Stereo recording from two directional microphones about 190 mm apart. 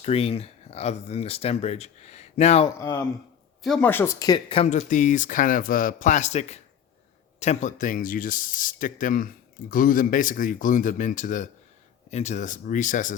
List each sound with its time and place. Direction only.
0.0 s speech: 30° left (ahead or behind)
2.7 s speech: 15° left (ahead or behind)
4.5 s speech: 35° left (ahead or behind)